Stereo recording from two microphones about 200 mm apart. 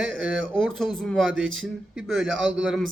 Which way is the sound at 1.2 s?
75° right (ahead or behind).